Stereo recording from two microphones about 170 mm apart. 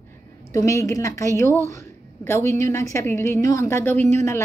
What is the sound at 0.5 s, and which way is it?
A woman's voice, 20° left (ahead or behind).